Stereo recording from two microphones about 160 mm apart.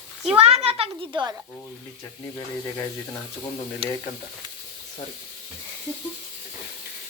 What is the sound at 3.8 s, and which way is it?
Speech, 35° right (ahead or behind).